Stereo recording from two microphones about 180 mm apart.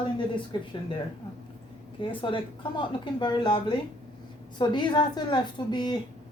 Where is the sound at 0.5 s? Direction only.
25° left (ahead or behind).